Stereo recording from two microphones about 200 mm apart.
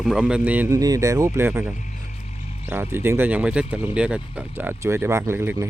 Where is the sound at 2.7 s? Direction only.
10° right (ahead or behind).